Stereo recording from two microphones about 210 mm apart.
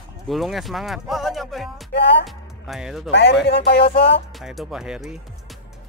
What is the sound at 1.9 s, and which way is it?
Speech, 55° left (ahead or behind).